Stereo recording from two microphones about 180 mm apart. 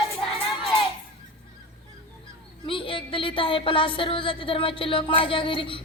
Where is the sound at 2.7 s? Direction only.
30° left (ahead or behind).